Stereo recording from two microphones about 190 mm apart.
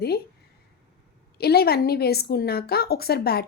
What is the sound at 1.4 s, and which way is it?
A woman's voice, 55° left (ahead or behind).